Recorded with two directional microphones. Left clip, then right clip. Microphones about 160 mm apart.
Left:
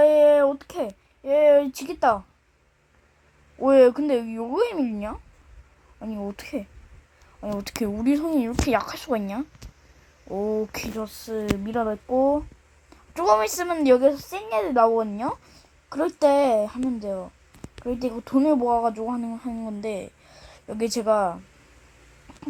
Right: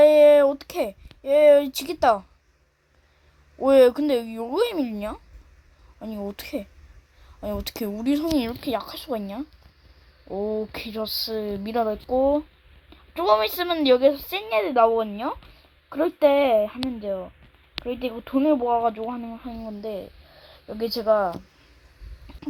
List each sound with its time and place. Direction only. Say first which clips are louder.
0.0 s a sound: right 2 dB; 20° right (ahead or behind)
0.9 s a sound: right 1 dB; centre (ahead or behind)
3.6 s speech: even; 5° left (ahead or behind)
7.8 s speech: left 2 dB; 10° left (ahead or behind)
11.2 s a woman's voice: even; 15° right (ahead or behind)
11.9 s a woman's voice: left 1 dB; 5° right (ahead or behind)
13.1 s speech: even; 15° left (ahead or behind)
14.0 s a woman's voice: right 1 dB; 10° right (ahead or behind)
14.4 s speech: right 1 dB; 10° left (ahead or behind)
15.0 s speech: even; 25° left (ahead or behind)
16.2 s speech: right 1 dB; 10° left (ahead or behind); by 20.6 s 35° left (ahead or behind)
21.0 s speech: right 1 dB; 20° left (ahead or behind)